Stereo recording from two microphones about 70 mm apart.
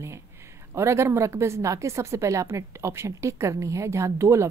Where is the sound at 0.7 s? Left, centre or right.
Right.